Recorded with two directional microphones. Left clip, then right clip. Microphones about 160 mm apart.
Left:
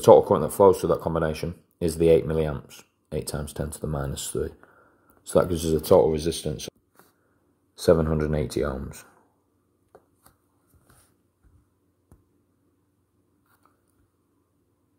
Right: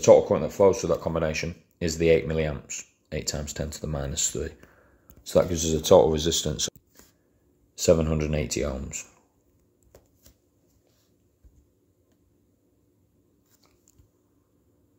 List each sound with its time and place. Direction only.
0.0 s speech: 35° left (ahead or behind)
3.9 s speech: 15° left (ahead or behind)
5.3 s speech: 35° left (ahead or behind)
5.9 s speech: 10° left (ahead or behind)
7.8 s speech: 10° left (ahead or behind)